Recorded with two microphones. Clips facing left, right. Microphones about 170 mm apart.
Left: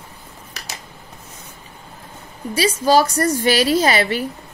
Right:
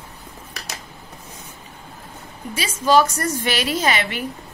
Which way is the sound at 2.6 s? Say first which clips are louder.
Left 2 dB; 35° left (ahead or behind).